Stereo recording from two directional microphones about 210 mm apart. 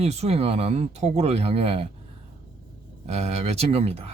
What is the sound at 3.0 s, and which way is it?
Speech, 30° right (ahead or behind).